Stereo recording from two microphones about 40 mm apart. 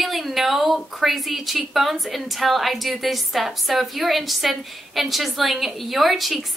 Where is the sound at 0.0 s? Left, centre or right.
Centre.